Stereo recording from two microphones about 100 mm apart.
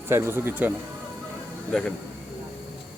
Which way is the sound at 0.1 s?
25° right (ahead or behind).